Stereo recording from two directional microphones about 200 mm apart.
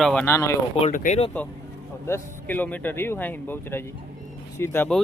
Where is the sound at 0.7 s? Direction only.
35° left (ahead or behind).